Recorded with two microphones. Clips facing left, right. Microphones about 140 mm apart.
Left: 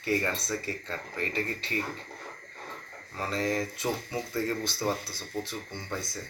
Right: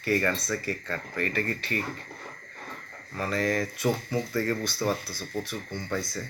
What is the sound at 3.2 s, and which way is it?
Speech, 20° left (ahead or behind).